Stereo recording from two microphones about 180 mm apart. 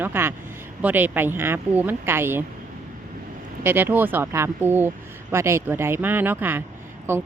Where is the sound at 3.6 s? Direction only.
10° right (ahead or behind).